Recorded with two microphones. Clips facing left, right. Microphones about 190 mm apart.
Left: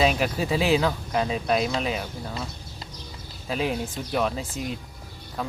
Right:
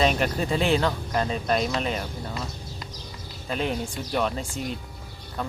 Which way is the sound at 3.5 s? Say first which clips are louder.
Left 1 dB; 5° left (ahead or behind).